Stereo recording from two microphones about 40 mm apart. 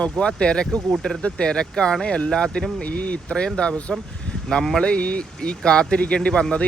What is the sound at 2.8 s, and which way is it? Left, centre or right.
Speech, left.